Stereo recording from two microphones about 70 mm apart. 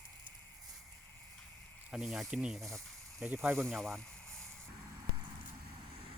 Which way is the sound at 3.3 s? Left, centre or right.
Right.